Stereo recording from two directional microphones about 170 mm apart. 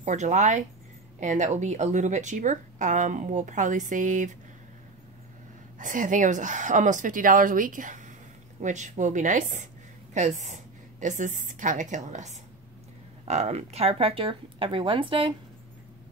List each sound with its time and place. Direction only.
0.0 s speech: 45° right (ahead or behind)
5.8 s speech: 50° right (ahead or behind); by 15.3 s 30° right (ahead or behind)